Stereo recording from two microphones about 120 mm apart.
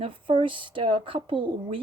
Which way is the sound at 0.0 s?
45° right (ahead or behind).